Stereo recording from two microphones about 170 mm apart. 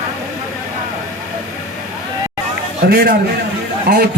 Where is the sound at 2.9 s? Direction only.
65° right (ahead or behind).